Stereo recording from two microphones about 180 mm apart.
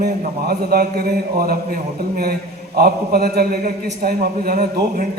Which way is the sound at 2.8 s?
55° right (ahead or behind).